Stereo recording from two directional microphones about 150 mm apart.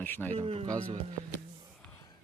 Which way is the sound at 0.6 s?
25° right (ahead or behind).